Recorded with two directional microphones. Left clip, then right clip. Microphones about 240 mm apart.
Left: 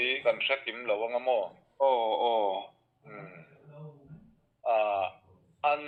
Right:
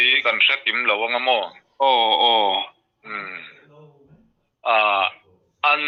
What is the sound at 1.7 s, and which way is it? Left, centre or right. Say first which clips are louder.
Speech: right 8 dB; right.